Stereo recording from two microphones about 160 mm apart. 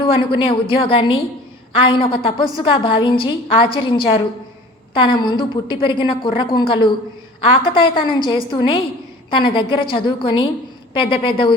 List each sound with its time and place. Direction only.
0.0 s a woman's voice: 30° left (ahead or behind)